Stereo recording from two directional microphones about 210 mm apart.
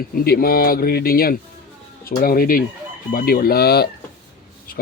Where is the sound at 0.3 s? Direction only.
45° left (ahead or behind).